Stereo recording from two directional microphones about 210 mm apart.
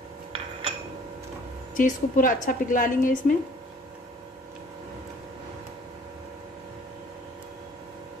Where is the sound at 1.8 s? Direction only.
40° left (ahead or behind).